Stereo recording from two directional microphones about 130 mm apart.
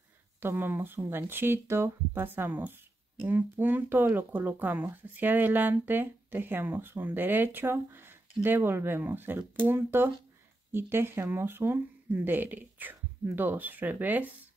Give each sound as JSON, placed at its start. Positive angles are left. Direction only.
{"t": 0.4, "sound": "speech", "side_deg": -15}